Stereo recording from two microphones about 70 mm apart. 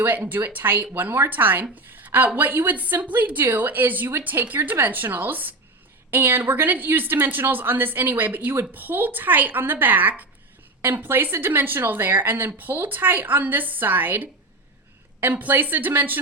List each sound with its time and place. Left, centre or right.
0.0 s speech: right